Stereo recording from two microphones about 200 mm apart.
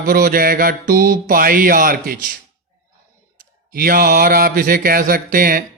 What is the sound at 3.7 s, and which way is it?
Speech, 45° right (ahead or behind).